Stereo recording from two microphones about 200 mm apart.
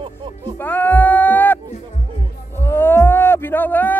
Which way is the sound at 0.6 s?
10° left (ahead or behind).